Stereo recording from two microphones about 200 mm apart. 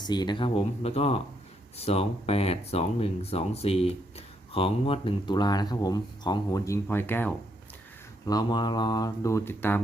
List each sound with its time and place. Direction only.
0.0 s speech: 20° left (ahead or behind)
8.3 s speech: 20° left (ahead or behind)